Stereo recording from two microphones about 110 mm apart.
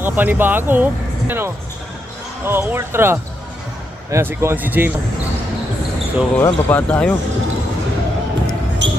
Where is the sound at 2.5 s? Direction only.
20° right (ahead or behind).